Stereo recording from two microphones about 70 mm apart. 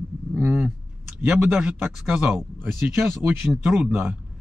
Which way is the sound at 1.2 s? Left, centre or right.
Centre.